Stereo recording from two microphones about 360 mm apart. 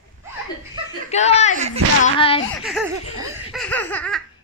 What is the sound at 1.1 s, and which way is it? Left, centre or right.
Speech, centre.